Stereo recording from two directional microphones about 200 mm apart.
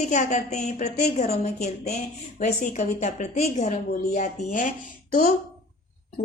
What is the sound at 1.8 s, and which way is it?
Speech, 50° left (ahead or behind).